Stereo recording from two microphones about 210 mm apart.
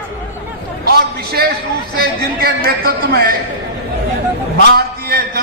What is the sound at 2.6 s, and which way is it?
Speech, 45° right (ahead or behind).